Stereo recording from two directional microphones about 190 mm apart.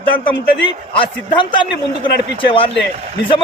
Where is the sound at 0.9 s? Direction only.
25° left (ahead or behind).